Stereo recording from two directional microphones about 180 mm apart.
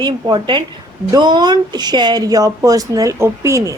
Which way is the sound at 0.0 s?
25° right (ahead or behind).